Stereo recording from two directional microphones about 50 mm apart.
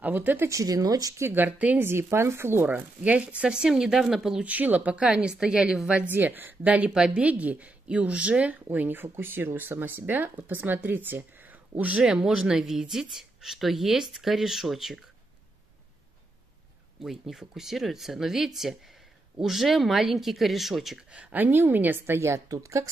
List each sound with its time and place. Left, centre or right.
0.0 s speech: right
0.5 s speech: right
1.3 s speech: right
1.8 s speech: right
2.7 s speech: right; by 4.4 s centre
4.4 s speech: right; by 5.8 s centre
6.0 s speech: right
6.9 s speech: centre
7.2 s speech: right
12.0 s speech: centre
17.0 s speech: centre
21.1 s speech: right
21.4 s speech: right
22.0 s speech: right